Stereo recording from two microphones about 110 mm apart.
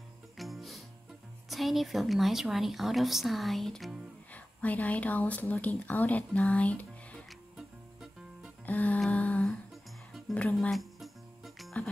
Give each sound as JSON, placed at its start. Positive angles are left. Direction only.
{"t": 0.4, "sound": "music", "side_deg": 0}
{"t": 1.5, "sound": "a woman's voice", "side_deg": 0}
{"t": 4.3, "sound": "speech", "side_deg": 15}
{"t": 7.2, "sound": "music", "side_deg": -5}
{"t": 8.6, "sound": "music", "side_deg": 15}
{"t": 9.1, "sound": "humming", "side_deg": 15}
{"t": 10.3, "sound": "speech", "side_deg": 15}
{"t": 10.7, "sound": "music", "side_deg": 0}